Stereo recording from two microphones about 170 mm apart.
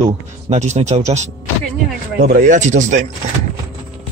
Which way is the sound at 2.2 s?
55° right (ahead or behind).